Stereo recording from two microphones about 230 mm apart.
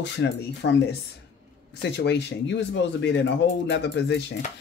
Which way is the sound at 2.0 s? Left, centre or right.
Left.